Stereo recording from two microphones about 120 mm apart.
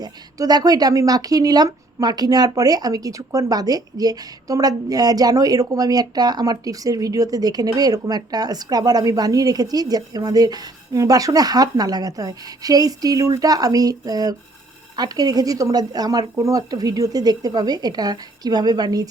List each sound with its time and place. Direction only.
0.0 s speech: 35° right (ahead or behind)